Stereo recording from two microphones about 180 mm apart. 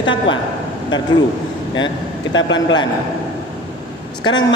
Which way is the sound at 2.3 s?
90° left.